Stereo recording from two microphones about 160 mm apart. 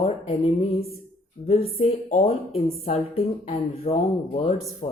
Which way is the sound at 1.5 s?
40° left (ahead or behind).